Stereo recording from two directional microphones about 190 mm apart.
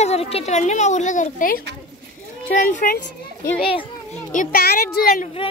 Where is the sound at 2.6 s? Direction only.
45° left (ahead or behind).